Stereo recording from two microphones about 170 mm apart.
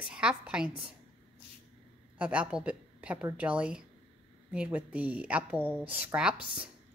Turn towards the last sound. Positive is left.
turn(degrees=-5)  # may be behind; listen again after turning